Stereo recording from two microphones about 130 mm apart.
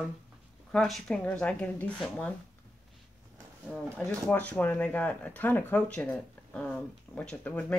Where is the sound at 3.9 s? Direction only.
10° left (ahead or behind).